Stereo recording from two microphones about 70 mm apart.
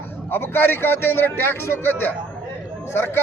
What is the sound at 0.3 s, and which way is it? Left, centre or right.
A man's voice, left.